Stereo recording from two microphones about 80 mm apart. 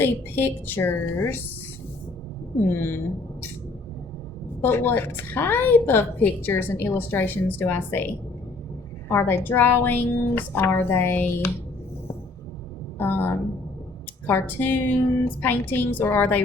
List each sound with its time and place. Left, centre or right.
0.0 s a woman's voice: left
2.6 s a woman's voice: left
4.6 s a woman's voice: left
9.0 s a woman's voice: left
13.0 s a woman's voice: left
14.6 s a woman's voice: left